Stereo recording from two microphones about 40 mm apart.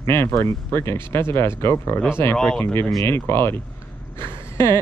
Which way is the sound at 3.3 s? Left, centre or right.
Left.